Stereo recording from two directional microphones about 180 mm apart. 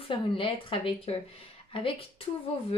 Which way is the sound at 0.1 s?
30° left (ahead or behind).